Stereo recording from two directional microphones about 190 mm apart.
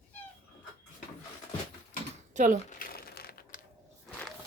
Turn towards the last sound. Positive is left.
turn(degrees=55)  # may be behind; listen again after turning